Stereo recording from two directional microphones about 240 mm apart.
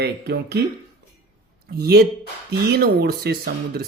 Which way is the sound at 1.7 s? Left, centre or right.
Right.